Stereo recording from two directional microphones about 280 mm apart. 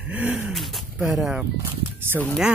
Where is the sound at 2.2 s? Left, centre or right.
Centre.